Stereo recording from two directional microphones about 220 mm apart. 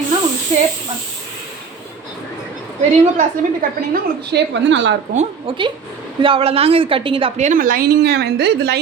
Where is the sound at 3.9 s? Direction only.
50° right (ahead or behind).